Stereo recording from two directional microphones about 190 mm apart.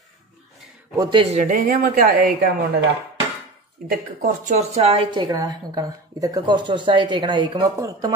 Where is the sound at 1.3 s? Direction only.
45° right (ahead or behind).